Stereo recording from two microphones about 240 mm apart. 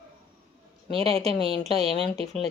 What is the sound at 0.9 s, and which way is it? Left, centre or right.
Speech, right.